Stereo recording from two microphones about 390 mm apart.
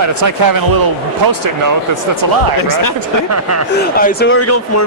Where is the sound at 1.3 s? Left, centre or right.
Right.